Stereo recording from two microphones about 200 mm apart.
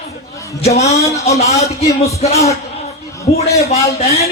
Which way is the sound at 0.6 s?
35° left (ahead or behind).